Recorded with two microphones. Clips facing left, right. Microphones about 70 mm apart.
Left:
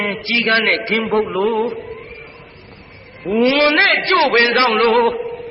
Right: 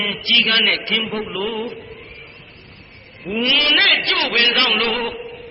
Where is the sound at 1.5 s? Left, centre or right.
Left.